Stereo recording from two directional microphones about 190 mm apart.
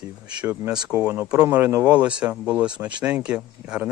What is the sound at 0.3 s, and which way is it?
Speech, 5° right (ahead or behind).